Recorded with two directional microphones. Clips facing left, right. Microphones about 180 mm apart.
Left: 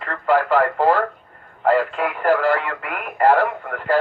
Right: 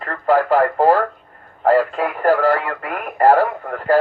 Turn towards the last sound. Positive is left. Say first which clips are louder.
# right 3 dB
turn(degrees=-40)  # may be behind; listen again after turning